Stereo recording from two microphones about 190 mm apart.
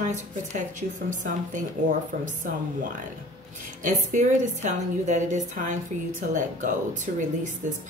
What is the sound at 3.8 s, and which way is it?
A woman's voice, 40° right (ahead or behind).